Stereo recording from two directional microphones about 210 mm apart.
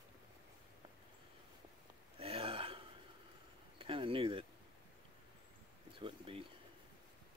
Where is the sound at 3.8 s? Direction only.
25° right (ahead or behind).